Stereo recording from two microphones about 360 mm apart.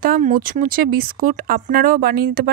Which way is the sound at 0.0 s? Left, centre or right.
Right.